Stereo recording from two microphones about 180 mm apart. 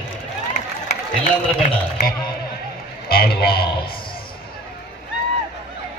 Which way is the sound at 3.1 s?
55° left (ahead or behind).